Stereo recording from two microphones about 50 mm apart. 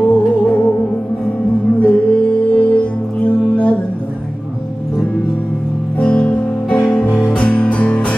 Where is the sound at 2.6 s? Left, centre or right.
Left.